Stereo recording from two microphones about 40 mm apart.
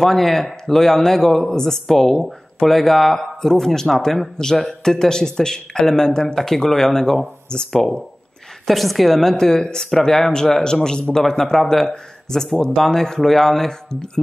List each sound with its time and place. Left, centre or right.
0.0 s a woman's voice: centre
8.6 s a woman's voice: centre